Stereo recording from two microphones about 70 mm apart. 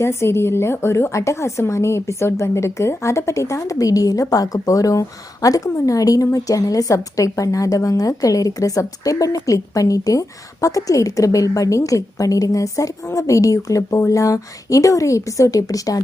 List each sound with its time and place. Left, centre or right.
0.0 s a woman's voice: left